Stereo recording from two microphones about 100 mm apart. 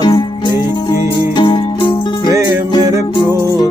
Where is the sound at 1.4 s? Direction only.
50° left (ahead or behind).